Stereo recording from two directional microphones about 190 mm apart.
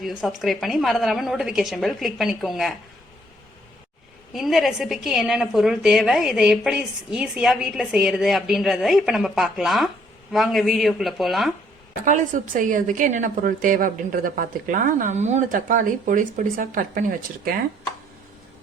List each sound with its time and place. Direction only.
0.0 s a woman's voice: centre (ahead or behind)
4.3 s a woman's voice: centre (ahead or behind)
12.0 s a woman's voice: 45° right (ahead or behind)